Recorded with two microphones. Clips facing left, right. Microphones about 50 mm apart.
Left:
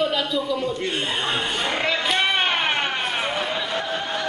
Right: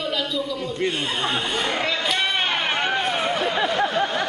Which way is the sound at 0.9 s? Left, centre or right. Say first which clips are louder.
Even; centre.